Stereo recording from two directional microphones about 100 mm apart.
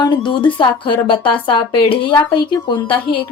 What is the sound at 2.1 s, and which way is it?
A woman's voice, 50° left (ahead or behind).